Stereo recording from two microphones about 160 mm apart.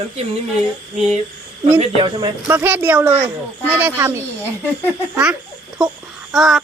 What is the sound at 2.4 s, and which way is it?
Speech, 10° right (ahead or behind).